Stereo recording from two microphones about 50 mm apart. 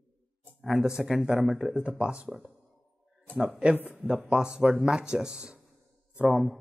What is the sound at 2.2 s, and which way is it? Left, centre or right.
Speech, centre.